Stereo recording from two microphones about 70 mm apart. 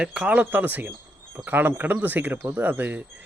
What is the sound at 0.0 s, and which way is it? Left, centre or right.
A man's voice, centre.